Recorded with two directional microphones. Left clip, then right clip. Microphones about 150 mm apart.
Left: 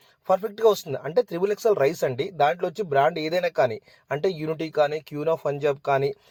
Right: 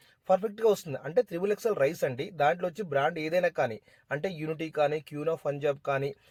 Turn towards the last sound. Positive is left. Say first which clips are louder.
# left 7 dB
turn(degrees=30)  # may be behind; listen again after turning